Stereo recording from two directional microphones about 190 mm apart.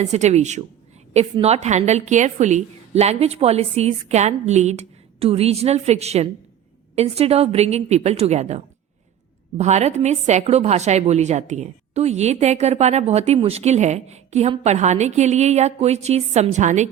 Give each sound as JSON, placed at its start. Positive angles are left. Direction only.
{"t": 0.0, "sound": "a woman's voice", "side_deg": -35}